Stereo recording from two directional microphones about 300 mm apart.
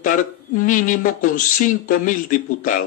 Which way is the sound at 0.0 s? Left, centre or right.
Left.